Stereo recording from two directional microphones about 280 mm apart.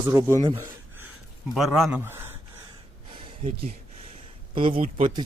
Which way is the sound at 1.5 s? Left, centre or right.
Centre.